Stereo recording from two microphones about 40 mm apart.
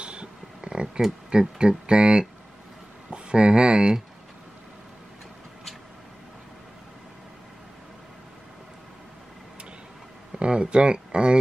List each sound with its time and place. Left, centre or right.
0.0 s a sound: right
1.6 s speech: right
10.3 s speech: right